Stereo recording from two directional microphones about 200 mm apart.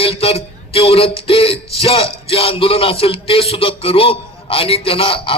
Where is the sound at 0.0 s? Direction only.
30° left (ahead or behind).